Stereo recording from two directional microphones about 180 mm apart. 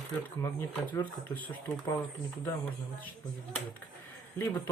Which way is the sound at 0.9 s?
5° left (ahead or behind).